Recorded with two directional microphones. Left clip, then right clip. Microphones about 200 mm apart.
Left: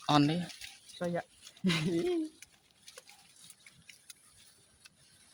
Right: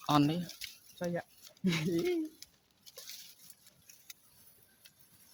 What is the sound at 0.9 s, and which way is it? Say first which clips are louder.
Speech: left 2 dB; 10° right (ahead or behind).